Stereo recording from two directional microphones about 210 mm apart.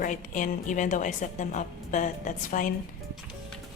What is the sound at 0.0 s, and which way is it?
A woman's voice, 40° left (ahead or behind).